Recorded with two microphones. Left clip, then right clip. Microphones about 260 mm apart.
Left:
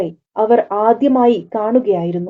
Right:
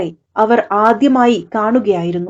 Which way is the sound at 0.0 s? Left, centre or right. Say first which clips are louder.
Right 2 dB; right.